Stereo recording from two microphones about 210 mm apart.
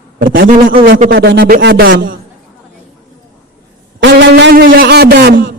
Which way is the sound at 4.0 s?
55° right (ahead or behind).